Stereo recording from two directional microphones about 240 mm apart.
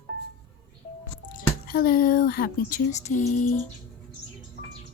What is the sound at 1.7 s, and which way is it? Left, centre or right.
Speech, left.